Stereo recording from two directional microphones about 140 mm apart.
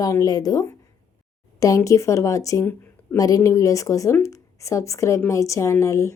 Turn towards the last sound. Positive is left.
turn(degrees=20)  # may be behind; listen again after turning